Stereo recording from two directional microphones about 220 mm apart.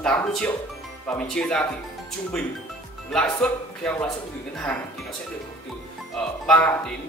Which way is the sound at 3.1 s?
5° left (ahead or behind).